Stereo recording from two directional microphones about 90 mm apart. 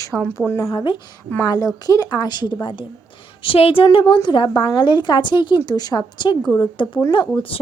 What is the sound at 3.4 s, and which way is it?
Speech, 90° left.